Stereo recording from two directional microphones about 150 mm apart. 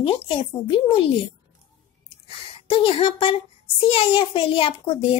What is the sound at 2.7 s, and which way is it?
A child's voice, 35° left (ahead or behind).